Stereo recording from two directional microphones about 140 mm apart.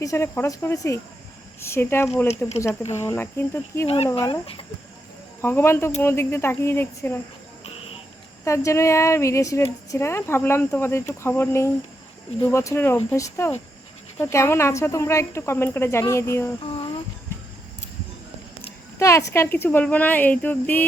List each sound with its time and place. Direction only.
0.0 s speech: 20° left (ahead or behind)
3.8 s speech: 45° left (ahead or behind)
5.4 s speech: 15° left (ahead or behind)
8.4 s speech: 20° left (ahead or behind)
18.9 s speech: 20° left (ahead or behind)